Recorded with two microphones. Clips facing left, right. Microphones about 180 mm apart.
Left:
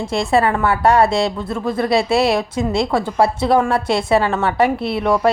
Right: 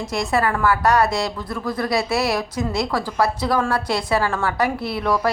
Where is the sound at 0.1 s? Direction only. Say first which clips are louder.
Left 5 dB; 30° left (ahead or behind).